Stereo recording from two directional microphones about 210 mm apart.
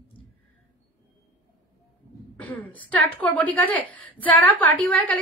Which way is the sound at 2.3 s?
5° left (ahead or behind).